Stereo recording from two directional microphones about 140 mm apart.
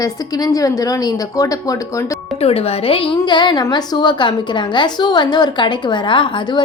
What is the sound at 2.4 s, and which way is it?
A woman's voice, 45° left (ahead or behind).